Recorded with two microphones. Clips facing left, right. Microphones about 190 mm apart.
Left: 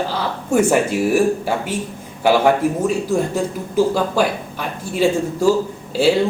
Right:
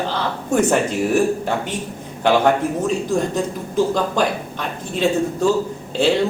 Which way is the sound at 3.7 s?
10° left (ahead or behind).